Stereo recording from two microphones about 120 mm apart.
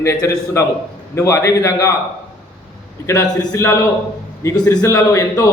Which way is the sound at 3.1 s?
30° left (ahead or behind).